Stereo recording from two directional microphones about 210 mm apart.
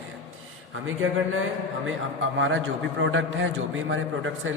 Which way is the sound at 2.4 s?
65° right (ahead or behind).